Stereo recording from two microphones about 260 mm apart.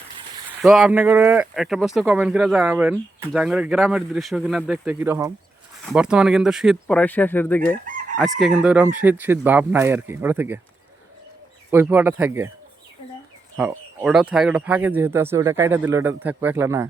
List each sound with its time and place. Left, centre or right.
0.2 s a sound: centre
0.7 s speech: centre
11.7 s speech: centre
13.6 s speech: centre